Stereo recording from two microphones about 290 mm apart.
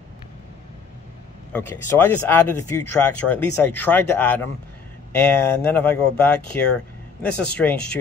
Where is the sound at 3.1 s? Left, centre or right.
Centre.